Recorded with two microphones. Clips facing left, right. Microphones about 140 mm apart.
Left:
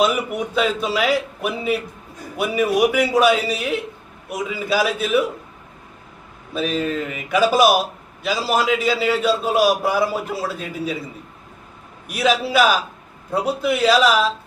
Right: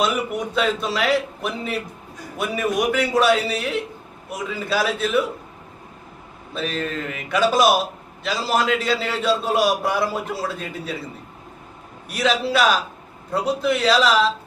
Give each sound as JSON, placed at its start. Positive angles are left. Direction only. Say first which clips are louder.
{"t": 0.5, "sound": "a man's voice", "louder": "left 2 dB", "side_deg": 5}
{"t": 6.5, "sound": "a man's voice", "louder": "left 4 dB", "side_deg": 5}
{"t": 12.1, "sound": "a man's voice", "louder": "left 2 dB", "side_deg": 5}